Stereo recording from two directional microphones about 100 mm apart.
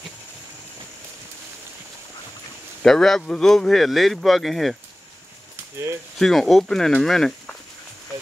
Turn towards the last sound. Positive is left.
turn(degrees=5)  # may be behind; listen again after turning